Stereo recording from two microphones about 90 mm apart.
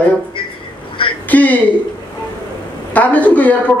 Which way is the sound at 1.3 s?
15° left (ahead or behind).